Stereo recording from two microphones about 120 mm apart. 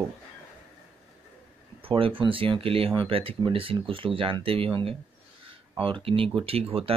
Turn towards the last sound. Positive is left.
turn(degrees=-55)  # may be behind; listen again after turning